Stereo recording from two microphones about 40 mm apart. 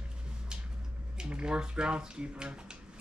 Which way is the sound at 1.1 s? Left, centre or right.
Right.